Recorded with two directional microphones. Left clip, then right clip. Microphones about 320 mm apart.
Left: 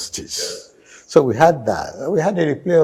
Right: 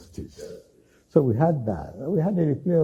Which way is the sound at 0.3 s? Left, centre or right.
Centre.